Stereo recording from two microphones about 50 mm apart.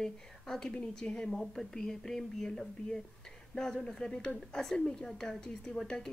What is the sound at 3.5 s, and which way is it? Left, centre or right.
Speech, centre.